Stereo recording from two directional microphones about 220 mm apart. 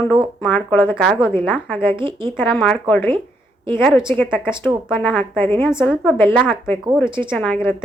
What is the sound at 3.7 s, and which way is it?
A woman's voice, 10° left (ahead or behind).